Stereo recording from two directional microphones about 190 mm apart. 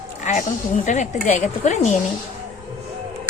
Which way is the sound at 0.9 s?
40° left (ahead or behind).